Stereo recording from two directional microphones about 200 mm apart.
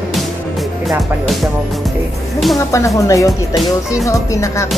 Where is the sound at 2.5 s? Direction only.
15° left (ahead or behind).